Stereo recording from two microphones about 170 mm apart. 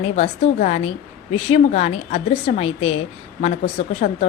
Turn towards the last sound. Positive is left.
turn(degrees=40)  # may be behind; listen again after turning